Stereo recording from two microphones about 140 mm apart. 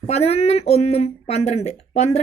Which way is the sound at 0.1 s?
50° left (ahead or behind).